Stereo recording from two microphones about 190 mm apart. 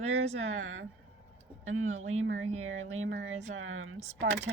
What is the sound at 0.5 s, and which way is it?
Speech, 90° right.